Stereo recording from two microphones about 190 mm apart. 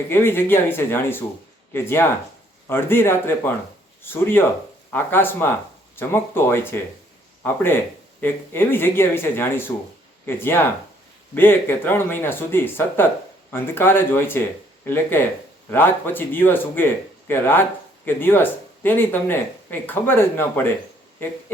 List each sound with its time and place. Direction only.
0.1 s speech: 10° left (ahead or behind)